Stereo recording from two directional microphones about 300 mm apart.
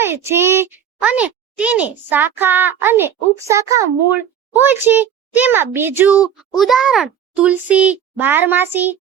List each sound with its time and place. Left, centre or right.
0.0 s a child's voice: centre